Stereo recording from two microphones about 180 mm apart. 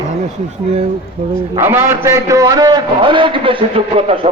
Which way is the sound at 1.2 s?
35° right (ahead or behind).